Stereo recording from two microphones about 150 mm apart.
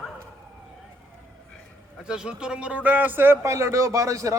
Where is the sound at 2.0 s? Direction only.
5° right (ahead or behind).